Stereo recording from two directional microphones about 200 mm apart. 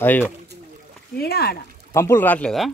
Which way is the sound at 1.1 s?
50° left (ahead or behind).